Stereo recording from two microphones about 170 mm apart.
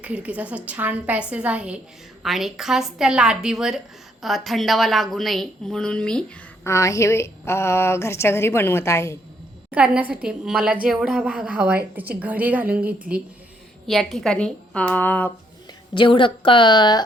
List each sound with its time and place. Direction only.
0.0 s a woman's voice: 10° right (ahead or behind)
6.7 s a woman's voice: 20° left (ahead or behind)
9.7 s a woman's voice: 5° right (ahead or behind); by 15.3 s 10° left (ahead or behind)
16.0 s a woman's voice: 30° left (ahead or behind)